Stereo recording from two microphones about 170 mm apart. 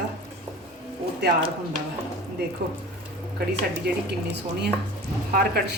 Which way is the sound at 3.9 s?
70° right (ahead or behind).